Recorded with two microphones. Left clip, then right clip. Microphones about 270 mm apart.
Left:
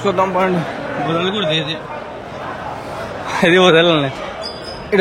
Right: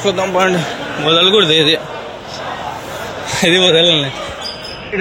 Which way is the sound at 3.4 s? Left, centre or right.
Centre.